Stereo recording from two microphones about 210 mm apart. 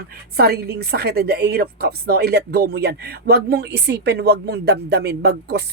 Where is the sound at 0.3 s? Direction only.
50° right (ahead or behind).